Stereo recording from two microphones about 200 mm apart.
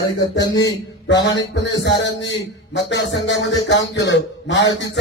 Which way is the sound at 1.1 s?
65° left (ahead or behind).